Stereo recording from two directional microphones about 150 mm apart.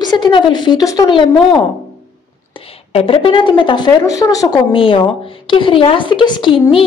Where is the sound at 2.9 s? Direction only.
40° left (ahead or behind); by 4.7 s 20° left (ahead or behind).